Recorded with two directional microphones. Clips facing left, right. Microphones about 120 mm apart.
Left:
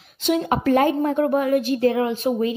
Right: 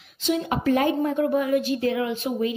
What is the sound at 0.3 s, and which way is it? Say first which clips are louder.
A woman's voice: left 3 dB; 55° left (ahead or behind).